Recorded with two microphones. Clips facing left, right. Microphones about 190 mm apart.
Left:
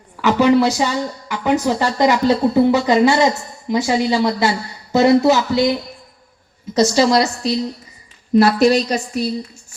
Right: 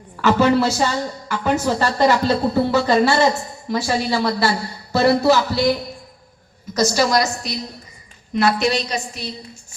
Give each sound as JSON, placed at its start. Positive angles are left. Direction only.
{"t": 0.2, "sound": "a woman's voice", "side_deg": 15}
{"t": 6.7, "sound": "a woman's voice", "side_deg": 20}
{"t": 8.3, "sound": "a woman's voice", "side_deg": 40}